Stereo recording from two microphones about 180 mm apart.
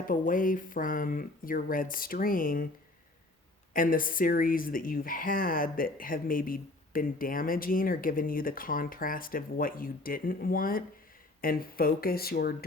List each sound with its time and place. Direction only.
0.1 s speech: 50° left (ahead or behind)
3.7 s speech: 50° left (ahead or behind)